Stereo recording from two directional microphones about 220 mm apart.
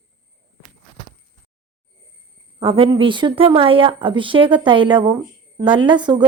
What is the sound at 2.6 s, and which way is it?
A woman's voice, 25° right (ahead or behind).